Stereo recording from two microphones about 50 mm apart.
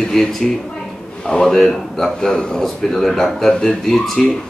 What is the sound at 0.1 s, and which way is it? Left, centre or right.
A man's voice, centre.